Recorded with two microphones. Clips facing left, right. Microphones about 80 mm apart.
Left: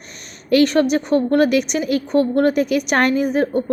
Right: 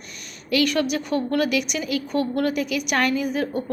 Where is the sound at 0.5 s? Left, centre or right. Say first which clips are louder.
Left 7 dB; left.